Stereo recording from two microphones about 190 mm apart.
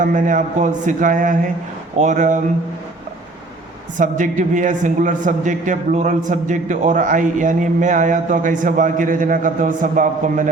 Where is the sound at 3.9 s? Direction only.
40° right (ahead or behind).